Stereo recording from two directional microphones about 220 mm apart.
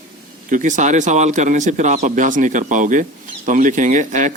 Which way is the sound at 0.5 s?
35° right (ahead or behind).